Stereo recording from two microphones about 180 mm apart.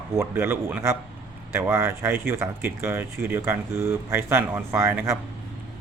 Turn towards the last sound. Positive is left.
turn(degrees=-15)  # may be behind; listen again after turning